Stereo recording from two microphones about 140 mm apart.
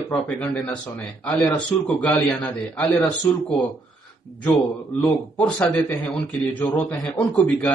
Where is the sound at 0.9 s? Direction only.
10° left (ahead or behind).